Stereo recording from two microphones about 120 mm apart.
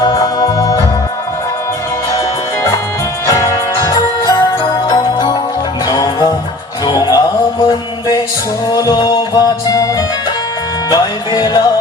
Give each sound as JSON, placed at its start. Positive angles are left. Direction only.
{"t": 0.0, "sound": "music", "side_deg": 35}
{"t": 3.2, "sound": "music", "side_deg": 30}